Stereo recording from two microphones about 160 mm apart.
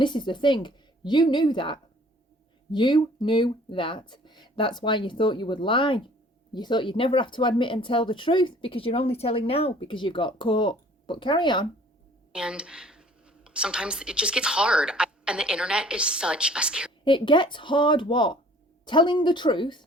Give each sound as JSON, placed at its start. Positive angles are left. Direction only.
{"t": 0.0, "sound": "a woman's voice", "side_deg": 30}
{"t": 12.3, "sound": "a woman's voice", "side_deg": -5}
{"t": 17.0, "sound": "a woman's voice", "side_deg": 30}